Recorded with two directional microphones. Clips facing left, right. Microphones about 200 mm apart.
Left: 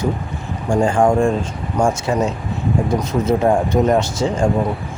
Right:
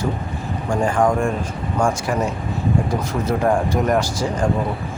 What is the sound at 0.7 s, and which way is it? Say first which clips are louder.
Speech: left 3 dB; 30° left (ahead or behind).